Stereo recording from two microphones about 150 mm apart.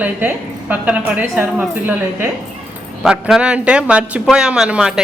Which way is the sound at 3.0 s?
5° right (ahead or behind).